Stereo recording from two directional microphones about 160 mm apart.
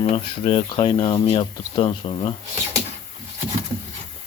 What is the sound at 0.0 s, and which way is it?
Speech, 30° left (ahead or behind).